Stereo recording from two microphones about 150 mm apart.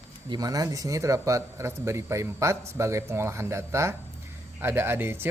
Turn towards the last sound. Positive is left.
turn(degrees=-15)  # may be behind; listen again after turning